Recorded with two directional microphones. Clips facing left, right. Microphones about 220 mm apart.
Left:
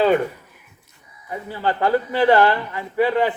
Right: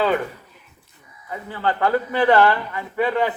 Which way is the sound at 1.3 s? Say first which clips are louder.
Left 1 dB; 10° left (ahead or behind).